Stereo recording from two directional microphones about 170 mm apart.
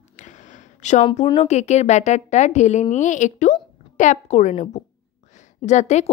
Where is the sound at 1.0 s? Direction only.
30° left (ahead or behind).